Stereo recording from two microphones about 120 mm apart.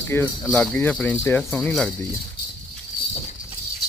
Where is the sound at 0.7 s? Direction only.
10° left (ahead or behind).